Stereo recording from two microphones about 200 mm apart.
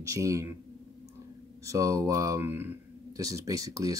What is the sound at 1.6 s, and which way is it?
Speech, 15° right (ahead or behind).